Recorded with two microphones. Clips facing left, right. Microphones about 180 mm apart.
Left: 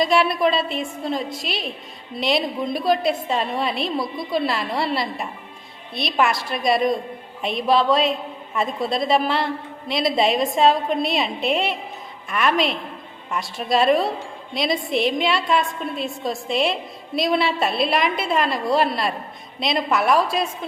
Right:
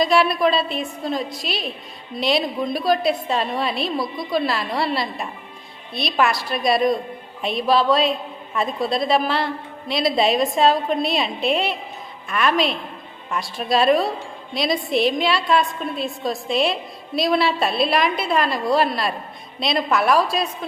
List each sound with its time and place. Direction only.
0.0 s a woman's voice: 25° left (ahead or behind)